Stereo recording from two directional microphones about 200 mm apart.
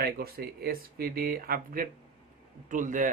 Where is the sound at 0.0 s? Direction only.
50° right (ahead or behind).